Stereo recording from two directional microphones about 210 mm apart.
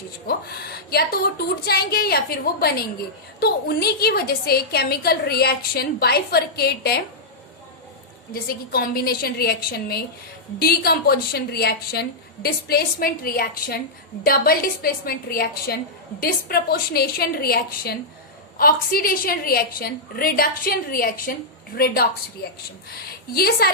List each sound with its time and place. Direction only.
0.3 s a woman's voice: 50° left (ahead or behind)
8.3 s a woman's voice: 45° left (ahead or behind)
23.0 s a woman's voice: 45° left (ahead or behind)